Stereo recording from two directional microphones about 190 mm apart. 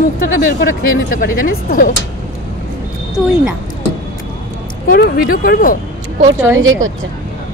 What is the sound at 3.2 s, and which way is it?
Speech, 5° right (ahead or behind).